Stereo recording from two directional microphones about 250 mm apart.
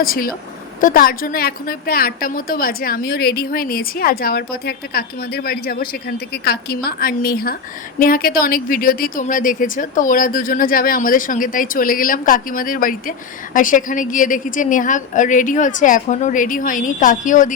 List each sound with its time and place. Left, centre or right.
0.0 s speech: left